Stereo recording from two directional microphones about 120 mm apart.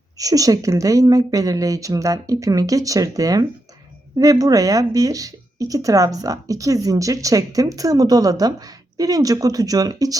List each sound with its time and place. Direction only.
0.2 s a woman's voice: 30° right (ahead or behind)